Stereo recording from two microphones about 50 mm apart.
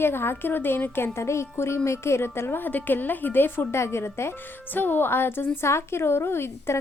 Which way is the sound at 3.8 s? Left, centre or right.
Left.